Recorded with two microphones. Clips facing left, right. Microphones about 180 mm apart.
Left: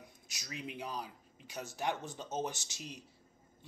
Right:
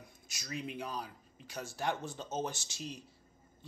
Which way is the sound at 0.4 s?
15° left (ahead or behind).